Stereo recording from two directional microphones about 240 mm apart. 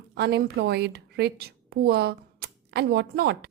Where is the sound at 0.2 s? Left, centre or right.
Right.